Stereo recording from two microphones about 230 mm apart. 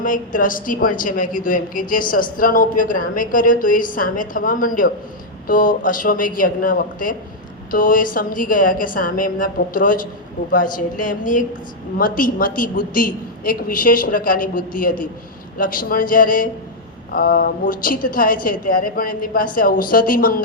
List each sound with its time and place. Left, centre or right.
0.0 s a woman's voice: left